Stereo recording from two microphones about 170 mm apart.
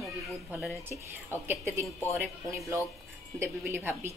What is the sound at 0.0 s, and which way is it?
A woman's voice, 5° right (ahead or behind).